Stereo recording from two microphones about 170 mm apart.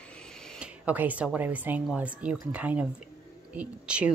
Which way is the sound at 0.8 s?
10° right (ahead or behind).